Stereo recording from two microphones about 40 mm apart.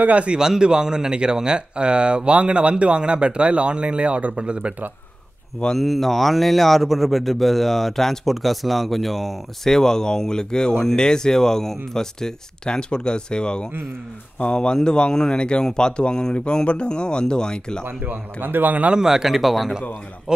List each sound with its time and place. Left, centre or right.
0.0 s a man's voice: right
0.4 s a man's voice: centre
5.8 s speech: centre
9.8 s speech: centre
18.0 s a man's voice: right
18.9 s a man's voice: centre